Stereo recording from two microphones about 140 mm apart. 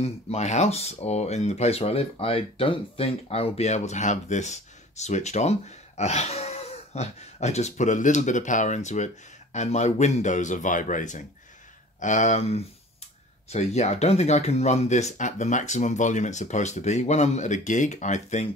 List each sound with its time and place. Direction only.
0.0 s speech: 50° left (ahead or behind)